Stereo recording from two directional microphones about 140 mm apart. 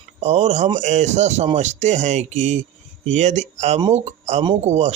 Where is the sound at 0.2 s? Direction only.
50° right (ahead or behind).